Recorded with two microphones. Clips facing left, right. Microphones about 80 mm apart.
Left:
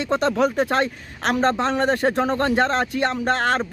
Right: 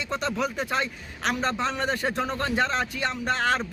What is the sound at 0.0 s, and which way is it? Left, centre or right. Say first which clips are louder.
Speech: left 8 dB; left.